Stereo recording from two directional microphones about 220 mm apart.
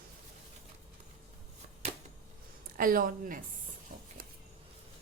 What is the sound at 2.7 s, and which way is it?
Speech, 40° right (ahead or behind).